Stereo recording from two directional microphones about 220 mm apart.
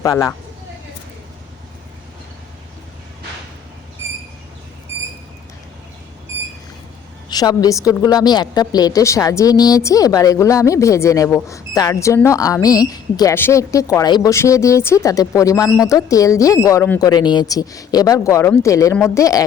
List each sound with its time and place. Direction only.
0.0 s a woman's voice: 15° left (ahead or behind)
7.3 s a woman's voice: 20° left (ahead or behind)